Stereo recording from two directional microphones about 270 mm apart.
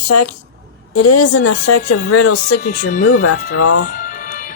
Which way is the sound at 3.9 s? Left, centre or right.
Left.